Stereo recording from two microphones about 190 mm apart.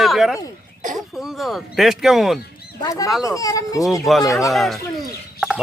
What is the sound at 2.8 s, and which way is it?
Speech, 20° left (ahead or behind).